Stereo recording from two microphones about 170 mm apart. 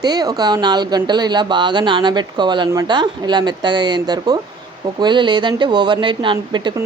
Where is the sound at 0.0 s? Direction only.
25° right (ahead or behind).